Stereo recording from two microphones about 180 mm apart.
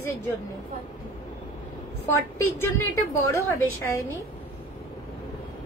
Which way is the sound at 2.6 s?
15° left (ahead or behind).